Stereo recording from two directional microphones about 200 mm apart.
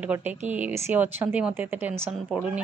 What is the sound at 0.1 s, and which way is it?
A woman's voice, 10° right (ahead or behind).